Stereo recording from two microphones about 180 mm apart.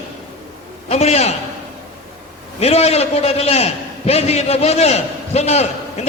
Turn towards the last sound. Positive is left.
turn(degrees=35)  # may be behind; listen again after turning